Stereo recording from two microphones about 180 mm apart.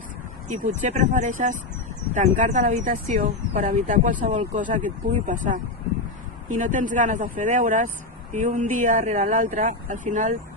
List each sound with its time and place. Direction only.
0.4 s speech: 45° right (ahead or behind)